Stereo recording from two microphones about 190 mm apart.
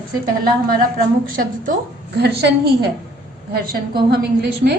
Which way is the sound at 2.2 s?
60° right (ahead or behind).